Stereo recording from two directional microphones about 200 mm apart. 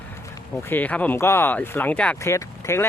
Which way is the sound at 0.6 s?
10° left (ahead or behind).